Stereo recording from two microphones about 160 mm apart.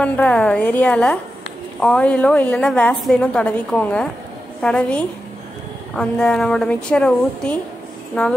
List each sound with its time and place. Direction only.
0.0 s a woman's voice: 5° left (ahead or behind)